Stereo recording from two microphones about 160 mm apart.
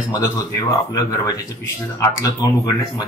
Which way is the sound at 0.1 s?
20° left (ahead or behind).